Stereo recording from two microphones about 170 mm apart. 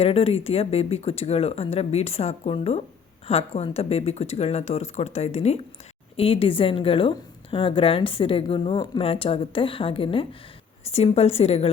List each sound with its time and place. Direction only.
0.0 s speech: 35° left (ahead or behind)